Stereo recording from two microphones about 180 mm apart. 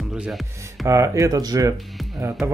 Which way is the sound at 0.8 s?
15° right (ahead or behind).